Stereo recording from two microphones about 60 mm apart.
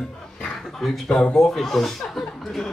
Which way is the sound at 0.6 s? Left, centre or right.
Centre.